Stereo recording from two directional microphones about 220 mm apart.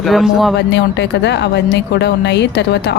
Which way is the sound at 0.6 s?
50° left (ahead or behind).